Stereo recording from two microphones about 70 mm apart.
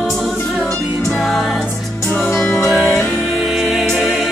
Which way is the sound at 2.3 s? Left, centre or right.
Left.